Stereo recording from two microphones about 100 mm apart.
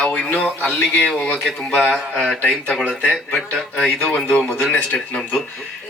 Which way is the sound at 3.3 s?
5° left (ahead or behind).